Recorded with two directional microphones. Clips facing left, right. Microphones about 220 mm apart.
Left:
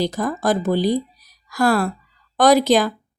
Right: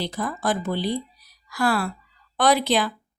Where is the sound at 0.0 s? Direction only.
40° left (ahead or behind).